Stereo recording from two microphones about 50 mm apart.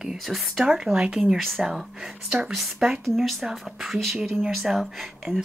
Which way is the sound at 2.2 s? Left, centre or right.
Right.